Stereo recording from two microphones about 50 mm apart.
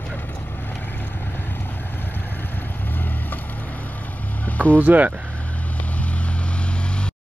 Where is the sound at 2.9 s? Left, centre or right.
Left.